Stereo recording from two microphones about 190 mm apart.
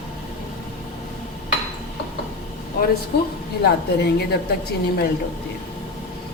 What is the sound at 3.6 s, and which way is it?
Speech, 60° left (ahead or behind).